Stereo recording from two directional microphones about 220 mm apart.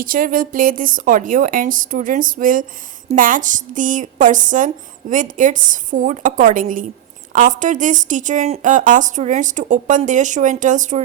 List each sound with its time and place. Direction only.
0.0 s a woman's voice: 40° right (ahead or behind)